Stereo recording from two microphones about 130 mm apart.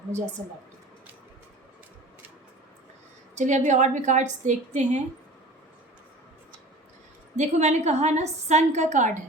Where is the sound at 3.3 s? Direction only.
65° right (ahead or behind).